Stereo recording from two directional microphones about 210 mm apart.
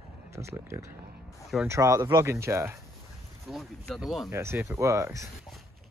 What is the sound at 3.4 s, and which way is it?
Speech, centre (ahead or behind).